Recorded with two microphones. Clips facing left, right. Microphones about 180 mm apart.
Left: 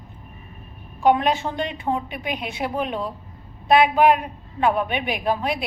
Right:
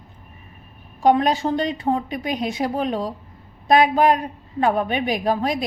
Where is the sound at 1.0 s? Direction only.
40° right (ahead or behind).